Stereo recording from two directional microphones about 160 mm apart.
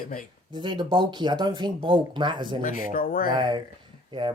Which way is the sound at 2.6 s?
60° left (ahead or behind).